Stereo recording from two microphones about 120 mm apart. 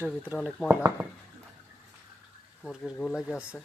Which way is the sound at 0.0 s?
15° right (ahead or behind).